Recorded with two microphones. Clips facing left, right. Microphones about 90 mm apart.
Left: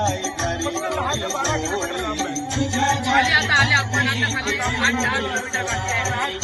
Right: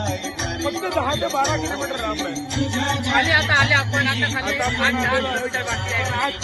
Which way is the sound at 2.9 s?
20° left (ahead or behind).